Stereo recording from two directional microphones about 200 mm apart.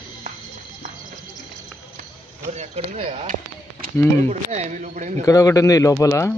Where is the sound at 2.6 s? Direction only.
35° right (ahead or behind).